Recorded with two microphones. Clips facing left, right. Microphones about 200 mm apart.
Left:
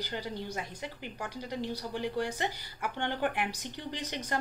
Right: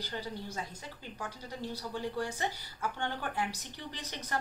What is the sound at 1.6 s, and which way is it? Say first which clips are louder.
Speech: even; 15° left (ahead or behind).